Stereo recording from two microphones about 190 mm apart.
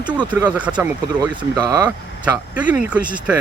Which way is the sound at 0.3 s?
10° right (ahead or behind).